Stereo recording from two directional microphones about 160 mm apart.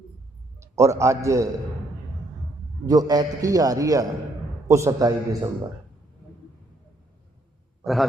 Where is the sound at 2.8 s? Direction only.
25° right (ahead or behind).